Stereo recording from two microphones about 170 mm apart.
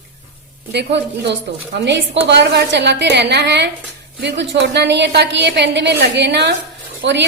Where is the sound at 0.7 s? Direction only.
90° right.